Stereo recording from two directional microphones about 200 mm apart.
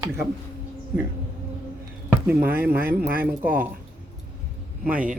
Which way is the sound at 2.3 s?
10° right (ahead or behind).